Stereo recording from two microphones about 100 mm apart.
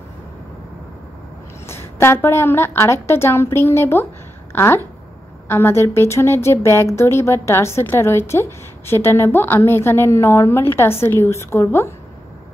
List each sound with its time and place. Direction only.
1.7 s a woman's voice: 25° left (ahead or behind)